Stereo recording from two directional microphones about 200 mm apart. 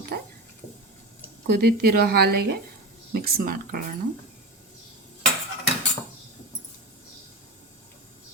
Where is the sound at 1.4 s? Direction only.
50° right (ahead or behind).